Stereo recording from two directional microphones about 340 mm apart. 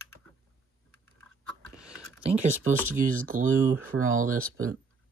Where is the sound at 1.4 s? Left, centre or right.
Centre.